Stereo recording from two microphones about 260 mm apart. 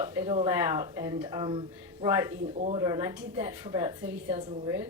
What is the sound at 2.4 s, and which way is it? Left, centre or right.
Speech, right.